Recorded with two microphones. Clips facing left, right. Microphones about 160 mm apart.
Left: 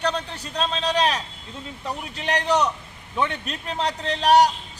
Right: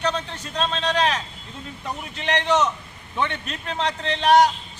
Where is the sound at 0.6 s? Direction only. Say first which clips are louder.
Even; 5° left (ahead or behind).